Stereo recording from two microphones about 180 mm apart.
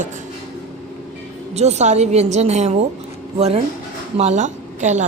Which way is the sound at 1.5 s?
40° right (ahead or behind).